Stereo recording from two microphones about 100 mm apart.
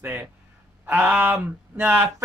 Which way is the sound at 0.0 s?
20° right (ahead or behind).